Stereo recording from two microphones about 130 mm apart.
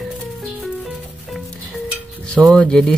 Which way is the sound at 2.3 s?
Centre (ahead or behind).